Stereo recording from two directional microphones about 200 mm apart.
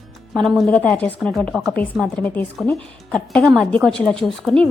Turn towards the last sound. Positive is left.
turn(degrees=0)  # may be behind; listen again after turning